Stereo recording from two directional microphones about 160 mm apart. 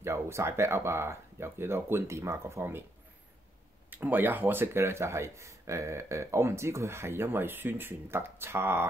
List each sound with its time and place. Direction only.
0.0 s speech: 15° right (ahead or behind)
3.9 s speech: 10° right (ahead or behind)